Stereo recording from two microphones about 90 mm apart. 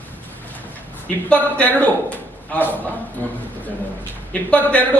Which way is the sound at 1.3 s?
15° left (ahead or behind).